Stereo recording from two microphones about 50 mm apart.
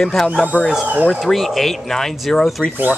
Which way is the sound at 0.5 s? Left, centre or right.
Left.